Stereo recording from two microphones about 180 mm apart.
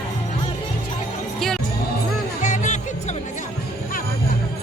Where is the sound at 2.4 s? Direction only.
45° left (ahead or behind).